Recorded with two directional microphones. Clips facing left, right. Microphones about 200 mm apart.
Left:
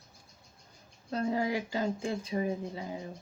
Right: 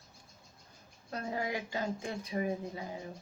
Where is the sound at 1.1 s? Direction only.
30° left (ahead or behind).